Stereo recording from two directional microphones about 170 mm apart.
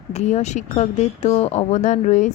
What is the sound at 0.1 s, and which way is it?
A woman's voice, 40° left (ahead or behind).